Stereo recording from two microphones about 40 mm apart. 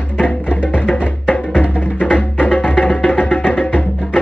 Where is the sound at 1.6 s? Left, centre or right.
Left.